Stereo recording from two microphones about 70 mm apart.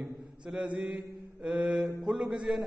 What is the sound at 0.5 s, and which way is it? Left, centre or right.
A man's voice, centre.